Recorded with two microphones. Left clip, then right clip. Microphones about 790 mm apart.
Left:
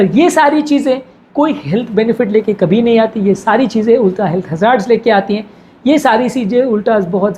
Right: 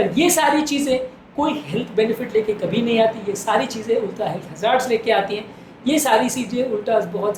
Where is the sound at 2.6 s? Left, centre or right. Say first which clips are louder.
Left 8 dB; left.